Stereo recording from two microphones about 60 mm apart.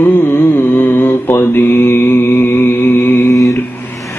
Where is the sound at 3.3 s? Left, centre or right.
Left.